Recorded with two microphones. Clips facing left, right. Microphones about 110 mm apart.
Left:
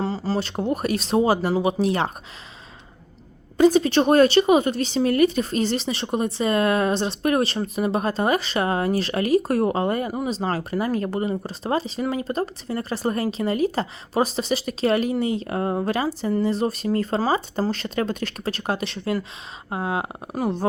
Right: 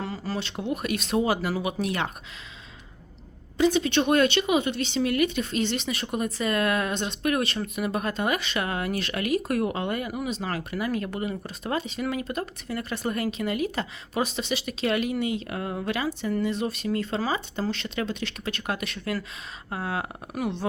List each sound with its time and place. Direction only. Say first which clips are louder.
0.0 s a woman's voice: left 7 dB; 30° left (ahead or behind)
3.6 s a woman's voice: left 6 dB; 40° left (ahead or behind)